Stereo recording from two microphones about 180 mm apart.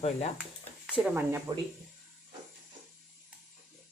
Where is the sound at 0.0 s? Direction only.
35° left (ahead or behind).